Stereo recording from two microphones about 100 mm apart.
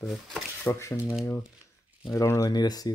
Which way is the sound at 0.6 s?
25° left (ahead or behind).